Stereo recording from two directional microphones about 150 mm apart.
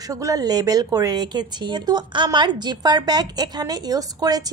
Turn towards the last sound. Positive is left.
turn(degrees=-25)  # may be behind; listen again after turning